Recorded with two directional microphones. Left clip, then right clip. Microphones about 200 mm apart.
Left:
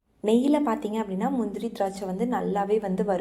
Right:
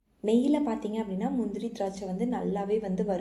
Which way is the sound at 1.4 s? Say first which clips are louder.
Left 4 dB; 30° left (ahead or behind).